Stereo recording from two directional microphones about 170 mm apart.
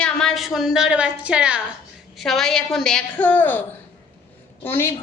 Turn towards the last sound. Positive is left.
turn(degrees=15)  # may be behind; listen again after turning